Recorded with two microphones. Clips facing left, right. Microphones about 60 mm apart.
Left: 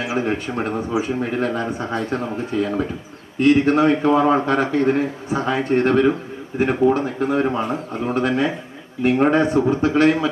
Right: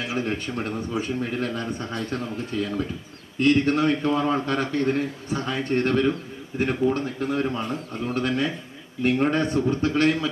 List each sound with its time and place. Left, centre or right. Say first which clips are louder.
0.0 s a man's voice: left 5 dB; centre
0.8 s a man's voice: left 5 dB; centre